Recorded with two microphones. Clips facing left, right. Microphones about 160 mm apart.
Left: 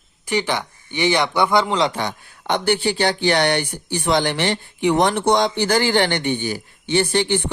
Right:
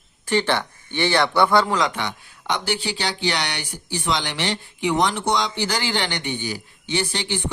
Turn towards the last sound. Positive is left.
turn(degrees=55)  # may be behind; listen again after turning